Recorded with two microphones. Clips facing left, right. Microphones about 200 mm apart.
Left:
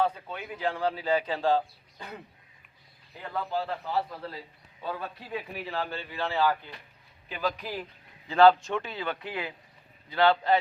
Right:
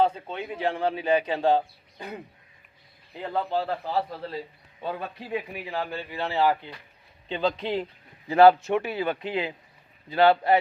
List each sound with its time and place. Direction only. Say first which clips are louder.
0.0 s a man's voice: right 4 dB; 25° right (ahead or behind)
3.2 s a man's voice: right 4 dB; 30° right (ahead or behind)
8.3 s a man's voice: right 3 dB; 15° right (ahead or behind)